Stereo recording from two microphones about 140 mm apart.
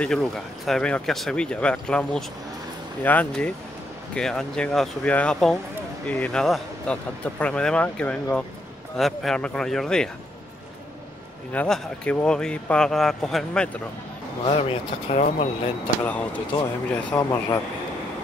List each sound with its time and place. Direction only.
0.0 s speech: 5° left (ahead or behind)
11.5 s speech: 5° left (ahead or behind)
14.4 s speech: 45° left (ahead or behind)
16.0 s speech: 10° left (ahead or behind)
17.1 s speech: 25° left (ahead or behind)